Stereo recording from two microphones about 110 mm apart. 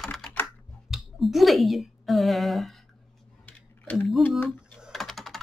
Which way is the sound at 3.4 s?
10° left (ahead or behind).